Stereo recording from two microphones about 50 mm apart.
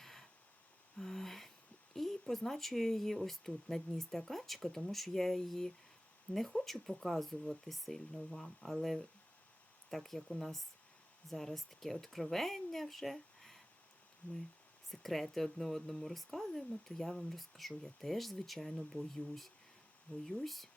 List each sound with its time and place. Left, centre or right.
0.0 s a sound: centre
2.0 s speech: centre
14.2 s speech: left
14.8 s speech: centre
20.1 s speech: left
20.4 s speech: centre